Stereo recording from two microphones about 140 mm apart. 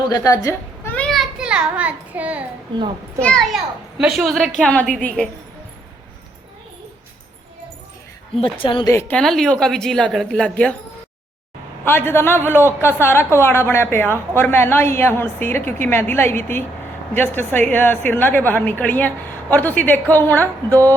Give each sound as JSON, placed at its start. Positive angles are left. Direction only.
{"t": 0.1, "sound": "a woman's voice", "side_deg": 25}
{"t": 0.9, "sound": "a sound", "side_deg": 5}
{"t": 3.2, "sound": "a woman's voice", "side_deg": 5}
{"t": 8.6, "sound": "a woman's voice", "side_deg": 35}
{"t": 8.9, "sound": "a woman's voice", "side_deg": 20}
{"t": 9.1, "sound": "a woman's voice", "side_deg": 5}
{"t": 11.9, "sound": "a woman's voice", "side_deg": 15}